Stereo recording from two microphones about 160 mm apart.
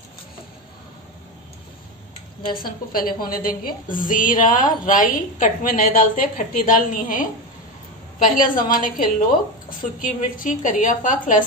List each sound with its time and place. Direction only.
2.5 s a woman's voice: 65° left (ahead or behind)